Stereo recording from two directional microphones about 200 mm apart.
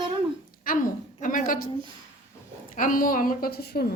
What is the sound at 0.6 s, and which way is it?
A woman's voice, 45° left (ahead or behind).